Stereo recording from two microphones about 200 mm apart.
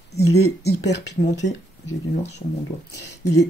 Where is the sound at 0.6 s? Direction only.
60° left (ahead or behind).